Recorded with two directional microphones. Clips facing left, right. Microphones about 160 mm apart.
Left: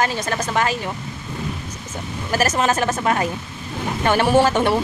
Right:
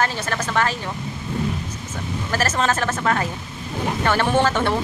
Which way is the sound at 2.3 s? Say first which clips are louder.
Left 3 dB; 15° left (ahead or behind).